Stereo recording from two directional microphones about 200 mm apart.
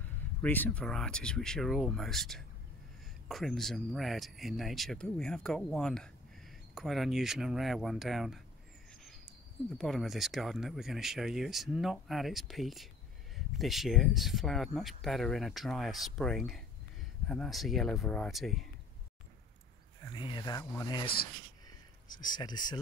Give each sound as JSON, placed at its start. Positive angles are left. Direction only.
{"t": 0.4, "sound": "speech", "side_deg": 10}
{"t": 9.8, "sound": "speech", "side_deg": 0}
{"t": 20.1, "sound": "speech", "side_deg": 20}
{"t": 21.6, "sound": "a sound", "side_deg": 20}